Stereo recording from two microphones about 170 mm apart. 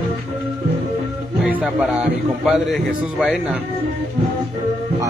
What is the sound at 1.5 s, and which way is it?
A man's voice, 5° right (ahead or behind).